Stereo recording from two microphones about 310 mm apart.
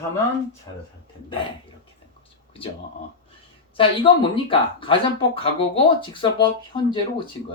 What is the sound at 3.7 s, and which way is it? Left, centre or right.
Speech, centre.